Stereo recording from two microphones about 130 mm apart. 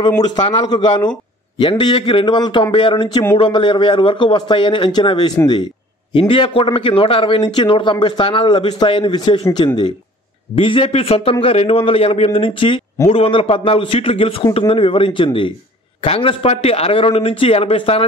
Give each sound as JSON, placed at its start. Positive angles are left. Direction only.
{"t": 0.4, "sound": "a man's voice", "side_deg": 35}